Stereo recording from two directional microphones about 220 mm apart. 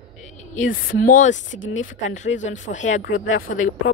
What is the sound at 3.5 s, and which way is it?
Speech, 65° left (ahead or behind).